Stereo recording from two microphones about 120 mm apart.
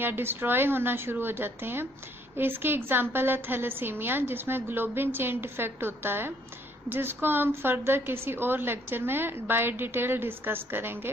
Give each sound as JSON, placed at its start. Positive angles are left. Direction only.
{"t": 0.0, "sound": "a woman's voice", "side_deg": -20}